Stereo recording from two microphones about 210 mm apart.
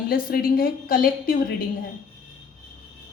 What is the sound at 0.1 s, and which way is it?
A woman's voice, 45° left (ahead or behind).